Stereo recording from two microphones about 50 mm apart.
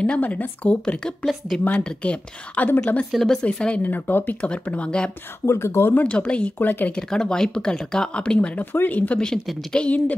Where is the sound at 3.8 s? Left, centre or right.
Left.